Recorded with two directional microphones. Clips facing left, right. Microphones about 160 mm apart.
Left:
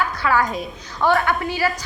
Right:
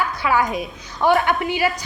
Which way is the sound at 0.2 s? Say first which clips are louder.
Right 1 dB; 15° right (ahead or behind).